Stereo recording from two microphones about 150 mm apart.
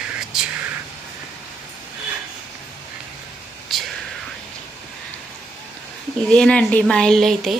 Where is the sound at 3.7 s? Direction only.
Centre (ahead or behind).